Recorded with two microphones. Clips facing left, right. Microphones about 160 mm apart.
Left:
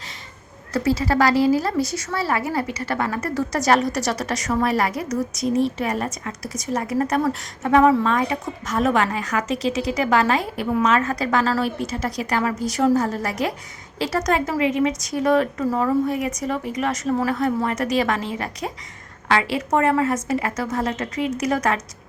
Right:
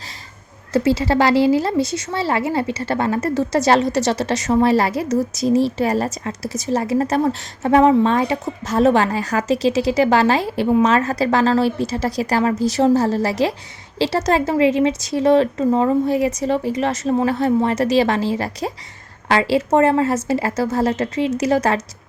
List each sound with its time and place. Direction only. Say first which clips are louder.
0.7 s a woman's voice: right 4 dB; 25° right (ahead or behind)